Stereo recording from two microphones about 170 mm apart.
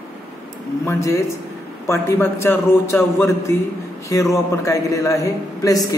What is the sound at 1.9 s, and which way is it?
A man's voice, 15° left (ahead or behind).